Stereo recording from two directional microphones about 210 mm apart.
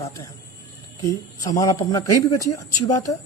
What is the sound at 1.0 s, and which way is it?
Speech, 15° left (ahead or behind).